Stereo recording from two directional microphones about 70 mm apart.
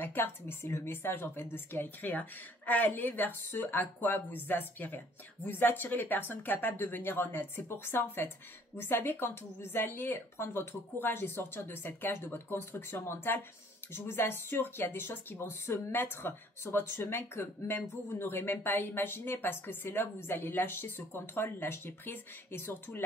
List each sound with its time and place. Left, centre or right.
0.0 s a woman's voice: left